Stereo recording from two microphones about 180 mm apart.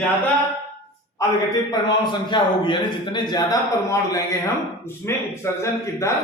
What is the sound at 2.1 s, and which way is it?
A man's voice, 25° left (ahead or behind).